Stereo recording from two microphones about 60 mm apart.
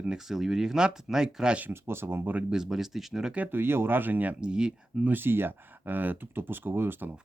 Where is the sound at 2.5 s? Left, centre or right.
Centre.